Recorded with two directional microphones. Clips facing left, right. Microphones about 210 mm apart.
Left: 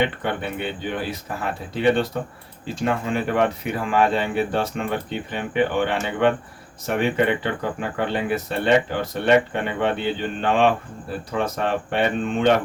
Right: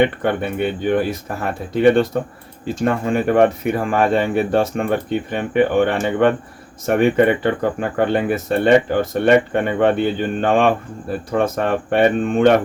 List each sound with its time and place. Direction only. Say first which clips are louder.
0.0 s speech: right 6 dB; 50° right (ahead or behind)